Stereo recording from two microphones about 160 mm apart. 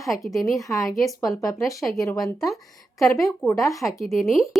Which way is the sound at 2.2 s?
Centre (ahead or behind).